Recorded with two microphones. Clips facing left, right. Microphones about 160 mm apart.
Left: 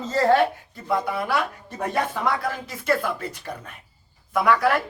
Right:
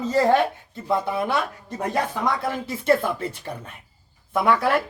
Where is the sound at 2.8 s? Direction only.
30° right (ahead or behind).